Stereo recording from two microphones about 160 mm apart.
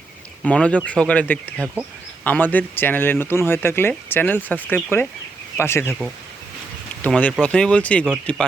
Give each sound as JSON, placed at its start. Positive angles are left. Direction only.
{"t": 0.4, "sound": "speech", "side_deg": 5}
{"t": 7.0, "sound": "speech", "side_deg": 10}